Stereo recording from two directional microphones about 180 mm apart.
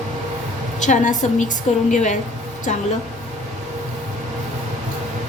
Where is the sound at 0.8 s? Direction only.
40° left (ahead or behind).